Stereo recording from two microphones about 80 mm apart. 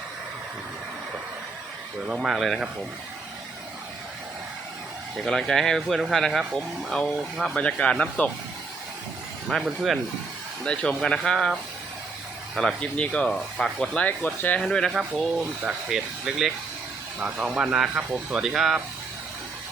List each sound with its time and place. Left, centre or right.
2.0 s speech: centre
5.1 s speech: centre
7.5 s speech: centre
9.5 s speech: centre
10.6 s speech: centre
12.5 s speech: centre
13.9 s speech: centre
14.6 s speech: centre
15.6 s speech: centre
17.2 s speech: centre